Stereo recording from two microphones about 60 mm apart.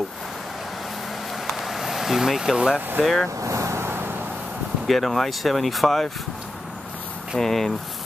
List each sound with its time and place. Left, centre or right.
1.5 s a sound: centre
3.0 s speech: centre
3.3 s vehicle: right
3.8 s vehicle: right
4.8 s speech: centre
7.3 s speech: centre